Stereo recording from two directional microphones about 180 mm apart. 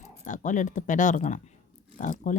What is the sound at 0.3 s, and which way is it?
Speech, 45° left (ahead or behind).